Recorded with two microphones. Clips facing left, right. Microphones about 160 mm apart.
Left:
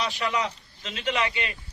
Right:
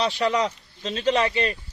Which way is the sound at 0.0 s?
35° right (ahead or behind).